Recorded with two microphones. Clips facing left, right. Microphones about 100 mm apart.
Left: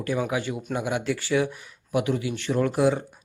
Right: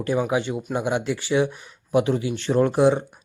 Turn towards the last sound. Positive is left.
turn(degrees=-25)  # may be behind; listen again after turning